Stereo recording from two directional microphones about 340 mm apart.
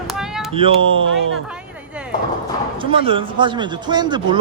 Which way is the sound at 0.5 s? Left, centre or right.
Centre.